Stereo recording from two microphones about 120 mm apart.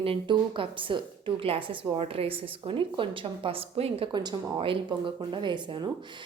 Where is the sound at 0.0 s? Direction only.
45° right (ahead or behind).